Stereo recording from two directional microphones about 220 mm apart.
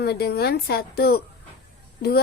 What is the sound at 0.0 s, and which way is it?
Speech, 45° left (ahead or behind).